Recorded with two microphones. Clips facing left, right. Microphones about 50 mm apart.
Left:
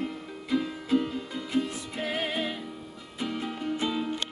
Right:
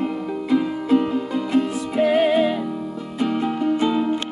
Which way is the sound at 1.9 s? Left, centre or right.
Centre.